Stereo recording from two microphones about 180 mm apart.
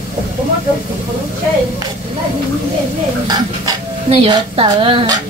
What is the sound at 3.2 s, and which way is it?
Speech, 20° right (ahead or behind).